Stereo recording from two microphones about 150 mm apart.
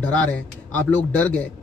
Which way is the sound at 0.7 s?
10° left (ahead or behind).